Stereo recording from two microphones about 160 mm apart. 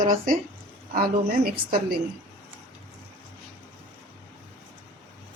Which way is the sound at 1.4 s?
70° right (ahead or behind).